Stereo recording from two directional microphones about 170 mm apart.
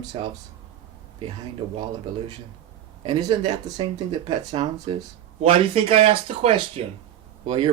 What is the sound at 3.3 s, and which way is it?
Speech, 25° right (ahead or behind).